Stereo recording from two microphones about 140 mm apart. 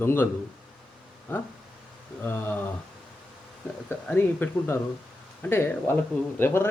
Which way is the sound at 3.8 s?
15° left (ahead or behind).